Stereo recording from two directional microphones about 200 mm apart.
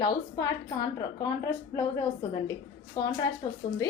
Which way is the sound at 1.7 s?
15° left (ahead or behind).